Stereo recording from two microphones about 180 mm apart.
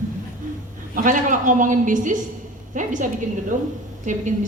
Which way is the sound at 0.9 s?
45° right (ahead or behind).